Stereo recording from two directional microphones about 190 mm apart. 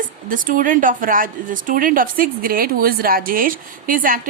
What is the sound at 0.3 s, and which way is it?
A woman's voice, 45° right (ahead or behind).